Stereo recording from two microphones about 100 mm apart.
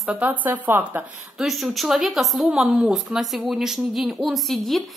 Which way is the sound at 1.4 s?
Centre (ahead or behind).